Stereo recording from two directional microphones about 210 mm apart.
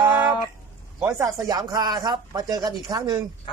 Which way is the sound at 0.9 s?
15° right (ahead or behind).